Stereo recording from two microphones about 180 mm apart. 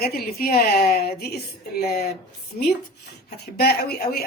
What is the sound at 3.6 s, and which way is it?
Speech, 60° left (ahead or behind).